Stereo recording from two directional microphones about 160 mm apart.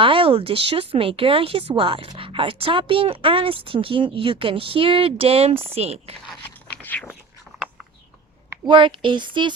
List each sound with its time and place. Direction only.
0.0 s speech: 35° right (ahead or behind)
6.2 s scrape: 10° left (ahead or behind)
8.6 s speech: 30° right (ahead or behind)